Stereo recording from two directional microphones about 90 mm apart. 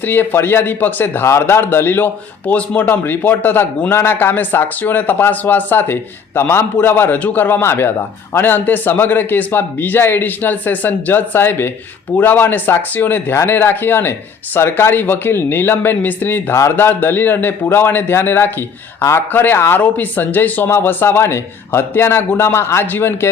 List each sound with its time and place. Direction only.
0.0 s a man's voice: 20° left (ahead or behind)